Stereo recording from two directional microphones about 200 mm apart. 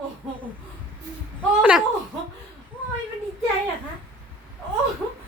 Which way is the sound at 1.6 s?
5° right (ahead or behind).